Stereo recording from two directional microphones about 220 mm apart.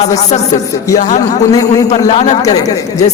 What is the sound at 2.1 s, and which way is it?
Speech, 30° left (ahead or behind).